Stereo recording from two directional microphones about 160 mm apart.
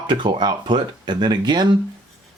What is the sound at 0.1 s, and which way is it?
Speech, 30° right (ahead or behind).